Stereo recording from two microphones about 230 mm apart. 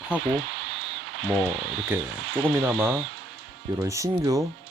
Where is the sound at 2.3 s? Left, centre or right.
Centre.